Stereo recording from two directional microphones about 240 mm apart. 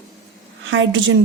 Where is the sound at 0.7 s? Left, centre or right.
Right.